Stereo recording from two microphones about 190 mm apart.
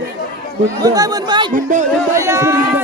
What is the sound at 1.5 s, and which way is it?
Speech, 40° right (ahead or behind).